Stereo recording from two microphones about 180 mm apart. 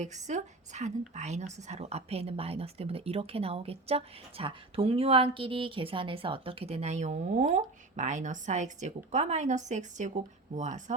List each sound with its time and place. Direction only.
0.3 s a woman's voice: 40° right (ahead or behind)